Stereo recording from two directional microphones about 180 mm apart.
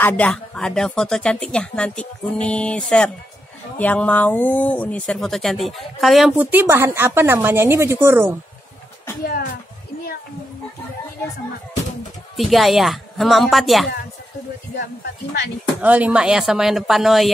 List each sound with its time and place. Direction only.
0.0 s speech: 5° left (ahead or behind); by 8.4 s 15° right (ahead or behind)
9.2 s a sound: 50° left (ahead or behind)
12.4 s speech: centre (ahead or behind)
15.8 s speech: 10° right (ahead or behind)